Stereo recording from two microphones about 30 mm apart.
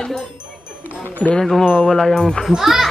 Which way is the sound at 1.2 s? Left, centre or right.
Left.